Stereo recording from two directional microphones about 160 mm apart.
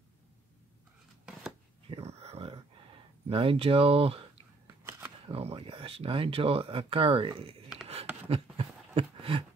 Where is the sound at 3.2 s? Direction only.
35° right (ahead or behind).